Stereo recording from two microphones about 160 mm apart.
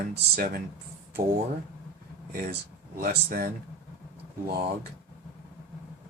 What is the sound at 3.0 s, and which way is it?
Speech, 70° right (ahead or behind).